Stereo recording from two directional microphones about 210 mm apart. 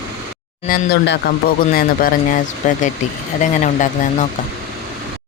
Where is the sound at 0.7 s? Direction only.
50° left (ahead or behind); by 4.2 s 35° left (ahead or behind).